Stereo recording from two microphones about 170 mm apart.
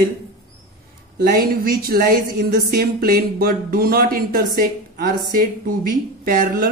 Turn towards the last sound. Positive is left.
turn(degrees=-55)  # may be behind; listen again after turning